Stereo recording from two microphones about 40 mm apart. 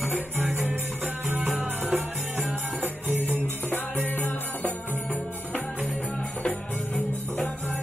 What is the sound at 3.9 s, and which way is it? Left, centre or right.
Music, left.